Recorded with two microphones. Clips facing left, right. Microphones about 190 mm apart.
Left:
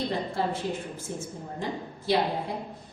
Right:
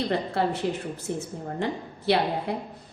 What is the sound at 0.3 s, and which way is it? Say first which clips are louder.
A woman's voice: right 3 dB; 65° right (ahead or behind).